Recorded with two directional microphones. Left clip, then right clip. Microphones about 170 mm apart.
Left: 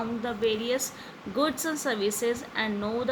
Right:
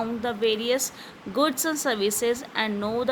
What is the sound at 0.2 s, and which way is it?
Speech, 65° right (ahead or behind).